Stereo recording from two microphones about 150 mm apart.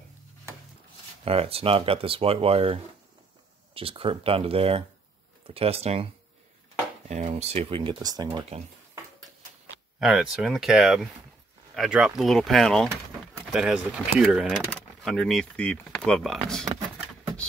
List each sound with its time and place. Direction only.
1.2 s speech: 40° right (ahead or behind)
7.1 s speech: 50° right (ahead or behind); by 8.5 s 30° right (ahead or behind)
9.9 s speech: 5° right (ahead or behind)